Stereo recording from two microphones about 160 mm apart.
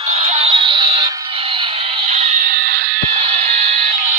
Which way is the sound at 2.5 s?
65° right (ahead or behind).